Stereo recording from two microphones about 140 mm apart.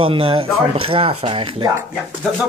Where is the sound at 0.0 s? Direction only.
40° right (ahead or behind).